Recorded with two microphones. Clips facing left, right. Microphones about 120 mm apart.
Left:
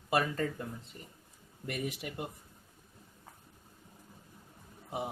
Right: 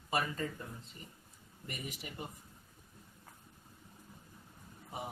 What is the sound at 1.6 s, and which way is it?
Speech, 65° left (ahead or behind).